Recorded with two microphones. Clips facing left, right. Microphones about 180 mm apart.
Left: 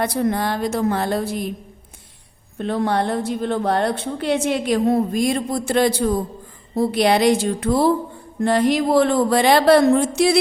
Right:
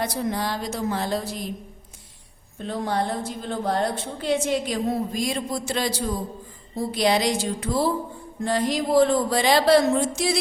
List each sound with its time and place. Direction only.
0.0 s a woman's voice: 60° left (ahead or behind)
2.6 s a woman's voice: 65° left (ahead or behind)